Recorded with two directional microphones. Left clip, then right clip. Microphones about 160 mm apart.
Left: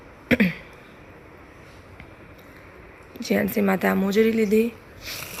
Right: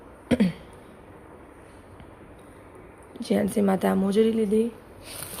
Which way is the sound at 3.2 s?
5° right (ahead or behind).